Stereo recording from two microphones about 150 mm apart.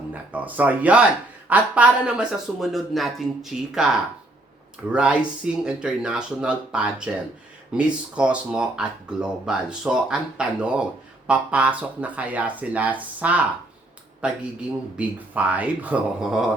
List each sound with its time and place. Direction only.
0.1 s speech: 10° right (ahead or behind)
4.9 s speech: 5° right (ahead or behind)
14.9 s speech: 10° right (ahead or behind)